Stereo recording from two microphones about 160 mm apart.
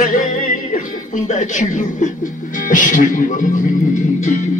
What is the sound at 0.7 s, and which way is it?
Speech, 50° left (ahead or behind).